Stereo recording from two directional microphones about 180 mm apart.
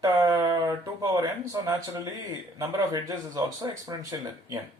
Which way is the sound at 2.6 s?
20° right (ahead or behind).